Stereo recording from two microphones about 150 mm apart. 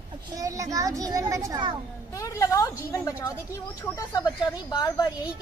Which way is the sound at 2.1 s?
20° left (ahead or behind).